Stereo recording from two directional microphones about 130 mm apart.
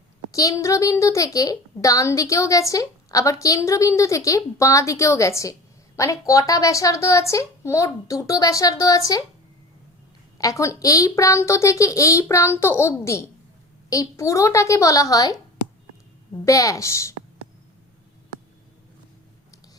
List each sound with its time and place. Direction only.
0.3 s a woman's voice: 25° left (ahead or behind)
10.3 s a woman's voice: 25° left (ahead or behind)